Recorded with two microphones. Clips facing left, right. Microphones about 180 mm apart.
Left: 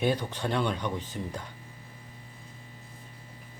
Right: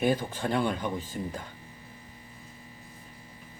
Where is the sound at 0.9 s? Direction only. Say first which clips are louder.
Right 1 dB; 50° right (ahead or behind).